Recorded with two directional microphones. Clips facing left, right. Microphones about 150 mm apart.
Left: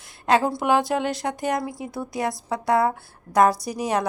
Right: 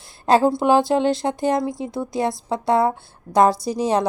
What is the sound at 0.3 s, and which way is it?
A woman's voice, 30° right (ahead or behind).